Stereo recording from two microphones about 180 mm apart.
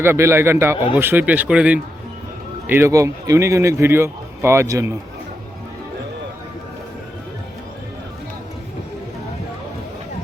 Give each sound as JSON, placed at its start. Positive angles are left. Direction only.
{"t": 0.0, "sound": "a man's voice", "side_deg": -15}